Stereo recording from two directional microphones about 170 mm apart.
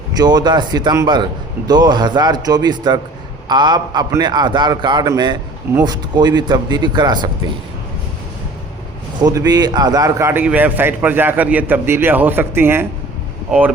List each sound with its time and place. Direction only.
0.2 s a man's voice: 25° right (ahead or behind)
9.2 s a man's voice: 25° right (ahead or behind)